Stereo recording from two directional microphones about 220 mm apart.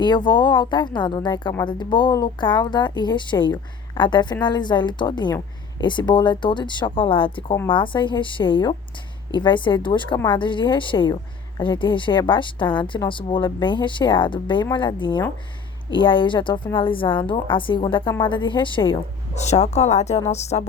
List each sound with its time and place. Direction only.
0.0 s a woman's voice: 20° left (ahead or behind)